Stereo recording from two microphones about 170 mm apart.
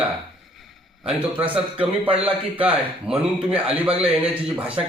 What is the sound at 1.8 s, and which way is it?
Speech, 35° right (ahead or behind).